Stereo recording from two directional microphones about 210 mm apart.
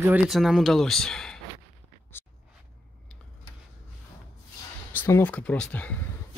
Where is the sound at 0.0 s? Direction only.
5° right (ahead or behind).